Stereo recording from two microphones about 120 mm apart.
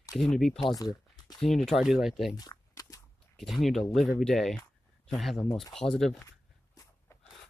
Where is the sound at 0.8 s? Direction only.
35° left (ahead or behind).